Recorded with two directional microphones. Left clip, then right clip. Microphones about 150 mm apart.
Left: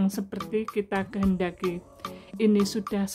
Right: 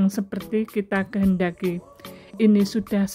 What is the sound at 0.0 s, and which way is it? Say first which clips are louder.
Speech: right 4 dB; 20° right (ahead or behind).